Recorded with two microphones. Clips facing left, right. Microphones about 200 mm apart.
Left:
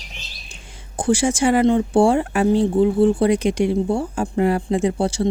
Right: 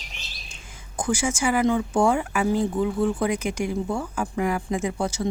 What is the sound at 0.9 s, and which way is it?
Speech, 30° left (ahead or behind).